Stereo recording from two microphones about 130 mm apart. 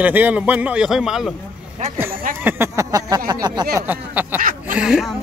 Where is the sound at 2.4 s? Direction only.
20° right (ahead or behind).